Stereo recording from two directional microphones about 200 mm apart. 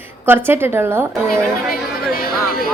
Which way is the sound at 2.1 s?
50° left (ahead or behind).